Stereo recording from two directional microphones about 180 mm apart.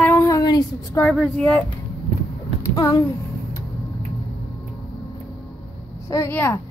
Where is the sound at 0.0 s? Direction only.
15° left (ahead or behind).